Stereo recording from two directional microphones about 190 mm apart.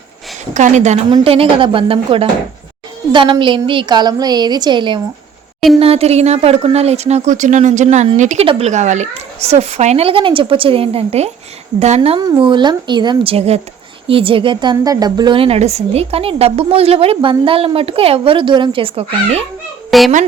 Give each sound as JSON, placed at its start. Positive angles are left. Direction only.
{"t": 0.5, "sound": "a child's voice", "side_deg": -40}
{"t": 19.9, "sound": "speech", "side_deg": 0}